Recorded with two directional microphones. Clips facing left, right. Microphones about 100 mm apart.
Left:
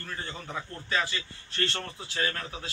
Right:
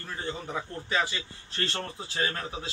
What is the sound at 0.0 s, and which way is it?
A man's voice, 20° right (ahead or behind).